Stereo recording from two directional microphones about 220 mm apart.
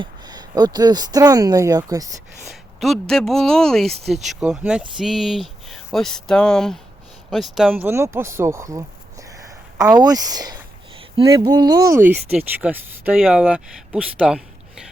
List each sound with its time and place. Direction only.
0.0 s speech: 20° right (ahead or behind)
2.5 s speech: centre (ahead or behind)
7.9 s speech: 10° right (ahead or behind)
9.9 s speech: 15° right (ahead or behind)